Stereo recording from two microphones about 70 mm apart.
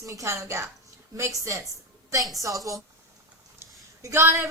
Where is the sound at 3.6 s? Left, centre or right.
Right.